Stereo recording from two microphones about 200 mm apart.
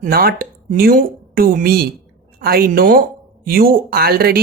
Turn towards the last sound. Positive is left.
turn(degrees=-50)  # may be behind; listen again after turning